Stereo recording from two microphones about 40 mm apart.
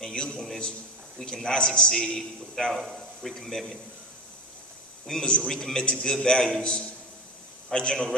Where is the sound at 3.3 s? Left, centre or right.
Centre.